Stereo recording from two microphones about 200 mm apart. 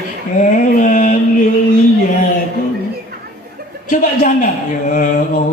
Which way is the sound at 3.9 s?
40° left (ahead or behind).